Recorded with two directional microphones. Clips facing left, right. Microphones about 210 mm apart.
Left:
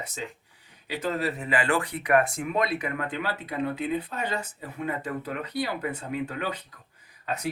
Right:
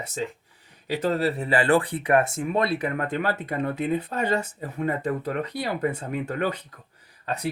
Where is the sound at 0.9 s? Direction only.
40° right (ahead or behind).